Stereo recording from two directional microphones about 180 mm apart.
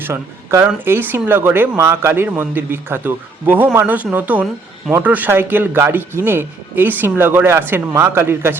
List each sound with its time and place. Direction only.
0.0 s speech: 15° right (ahead or behind)